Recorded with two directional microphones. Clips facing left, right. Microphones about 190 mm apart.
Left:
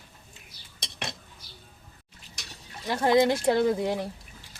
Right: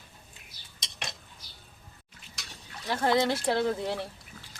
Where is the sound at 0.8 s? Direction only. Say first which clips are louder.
Left 4 dB; 60° left (ahead or behind).